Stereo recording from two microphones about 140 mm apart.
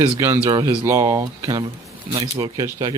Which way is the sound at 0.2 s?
20° right (ahead or behind).